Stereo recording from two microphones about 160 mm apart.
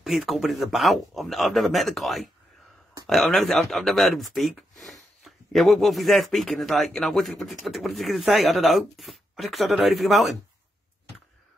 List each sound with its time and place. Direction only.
0.0 s speech: centre (ahead or behind)